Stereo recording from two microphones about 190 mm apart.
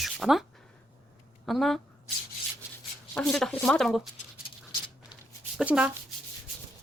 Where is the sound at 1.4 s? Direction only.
Centre (ahead or behind).